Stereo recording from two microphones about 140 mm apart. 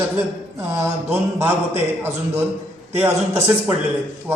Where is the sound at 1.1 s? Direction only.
15° right (ahead or behind).